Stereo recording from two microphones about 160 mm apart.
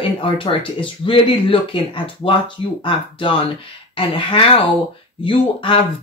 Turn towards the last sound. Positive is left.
turn(degrees=35)  # may be behind; listen again after turning